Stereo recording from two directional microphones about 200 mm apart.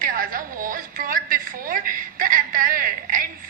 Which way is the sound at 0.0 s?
45° right (ahead or behind).